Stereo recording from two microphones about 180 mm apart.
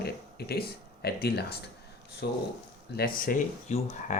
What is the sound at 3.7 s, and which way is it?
Speech, 40° left (ahead or behind).